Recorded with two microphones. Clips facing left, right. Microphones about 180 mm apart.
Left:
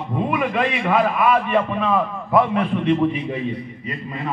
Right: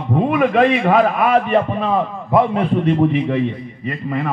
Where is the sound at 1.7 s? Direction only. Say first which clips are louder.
Right 2 dB; 30° right (ahead or behind).